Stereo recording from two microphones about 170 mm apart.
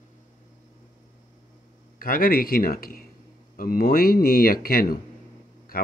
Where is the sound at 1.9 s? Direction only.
60° left (ahead or behind).